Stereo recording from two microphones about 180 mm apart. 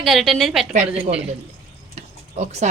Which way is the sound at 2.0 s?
35° right (ahead or behind).